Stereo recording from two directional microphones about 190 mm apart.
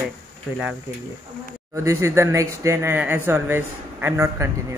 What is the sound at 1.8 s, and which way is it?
Speech, 15° right (ahead or behind).